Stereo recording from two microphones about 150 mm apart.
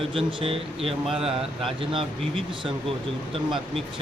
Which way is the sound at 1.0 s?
Centre (ahead or behind).